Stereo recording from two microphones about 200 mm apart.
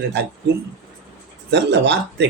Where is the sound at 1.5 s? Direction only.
60° right (ahead or behind).